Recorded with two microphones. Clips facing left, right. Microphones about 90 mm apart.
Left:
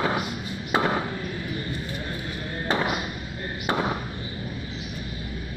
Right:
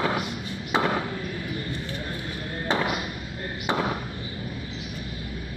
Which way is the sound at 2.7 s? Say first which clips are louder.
Even; 20° left (ahead or behind).